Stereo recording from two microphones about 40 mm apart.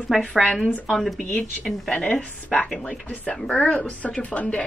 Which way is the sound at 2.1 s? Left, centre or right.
Left.